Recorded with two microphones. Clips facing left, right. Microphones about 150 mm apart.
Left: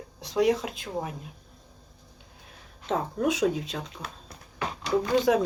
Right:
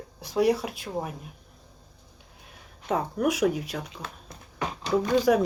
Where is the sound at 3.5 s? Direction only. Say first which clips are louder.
Right 1 dB; 25° left (ahead or behind).